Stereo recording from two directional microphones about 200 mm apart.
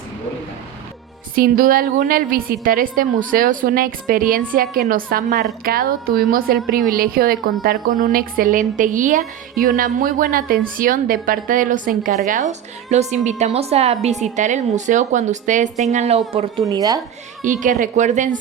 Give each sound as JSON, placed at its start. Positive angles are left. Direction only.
{"t": 1.4, "sound": "a woman's voice", "side_deg": -45}
{"t": 16.6, "sound": "speech", "side_deg": -20}
{"t": 17.4, "sound": "a woman's voice", "side_deg": -40}